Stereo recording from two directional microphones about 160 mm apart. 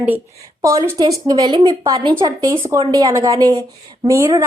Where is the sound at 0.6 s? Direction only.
20° right (ahead or behind).